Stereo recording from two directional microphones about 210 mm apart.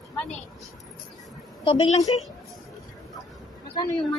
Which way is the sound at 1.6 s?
25° left (ahead or behind).